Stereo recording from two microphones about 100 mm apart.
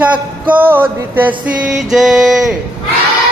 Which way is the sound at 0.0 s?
15° right (ahead or behind).